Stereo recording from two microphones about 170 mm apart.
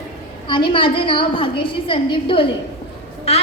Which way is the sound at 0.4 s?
30° left (ahead or behind).